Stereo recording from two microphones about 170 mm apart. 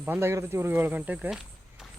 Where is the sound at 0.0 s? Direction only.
15° right (ahead or behind).